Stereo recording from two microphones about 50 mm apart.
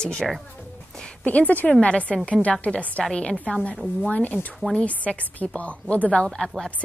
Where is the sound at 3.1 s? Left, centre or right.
Centre.